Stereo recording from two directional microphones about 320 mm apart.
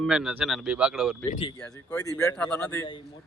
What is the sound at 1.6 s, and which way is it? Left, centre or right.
Speech, centre.